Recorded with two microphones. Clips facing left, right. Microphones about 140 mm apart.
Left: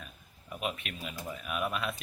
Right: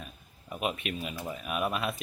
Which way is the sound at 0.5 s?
15° right (ahead or behind).